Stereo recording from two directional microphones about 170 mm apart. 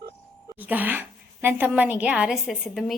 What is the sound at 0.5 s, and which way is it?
A woman's voice, 10° right (ahead or behind).